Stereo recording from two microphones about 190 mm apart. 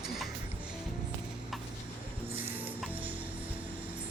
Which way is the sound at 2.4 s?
10° right (ahead or behind).